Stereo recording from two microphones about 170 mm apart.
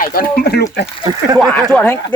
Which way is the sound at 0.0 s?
60° left (ahead or behind).